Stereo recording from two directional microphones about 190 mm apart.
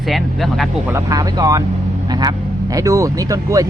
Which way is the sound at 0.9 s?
20° right (ahead or behind).